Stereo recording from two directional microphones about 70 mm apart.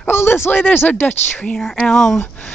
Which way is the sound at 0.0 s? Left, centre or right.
Left.